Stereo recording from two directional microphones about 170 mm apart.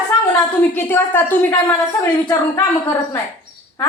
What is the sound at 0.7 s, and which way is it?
A woman's voice, 10° left (ahead or behind).